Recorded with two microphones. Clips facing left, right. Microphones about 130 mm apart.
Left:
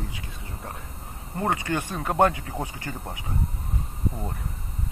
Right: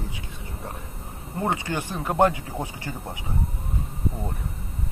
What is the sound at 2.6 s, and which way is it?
Speech, 25° right (ahead or behind).